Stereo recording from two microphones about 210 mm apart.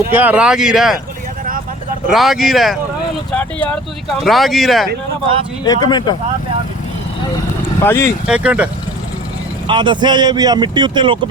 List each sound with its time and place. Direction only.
0.1 s speech: 10° right (ahead or behind)
2.0 s speech: centre (ahead or behind)
5.6 s speech: 20° left (ahead or behind)
7.9 s speech: 15° left (ahead or behind)
8.3 s speech: 5° right (ahead or behind)
9.6 s speech: 20° right (ahead or behind)